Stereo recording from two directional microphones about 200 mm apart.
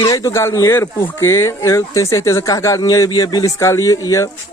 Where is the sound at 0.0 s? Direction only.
15° left (ahead or behind).